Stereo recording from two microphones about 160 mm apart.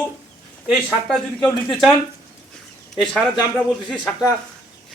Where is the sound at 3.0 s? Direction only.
Centre (ahead or behind).